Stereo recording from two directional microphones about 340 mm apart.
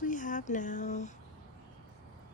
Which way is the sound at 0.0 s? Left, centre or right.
Left.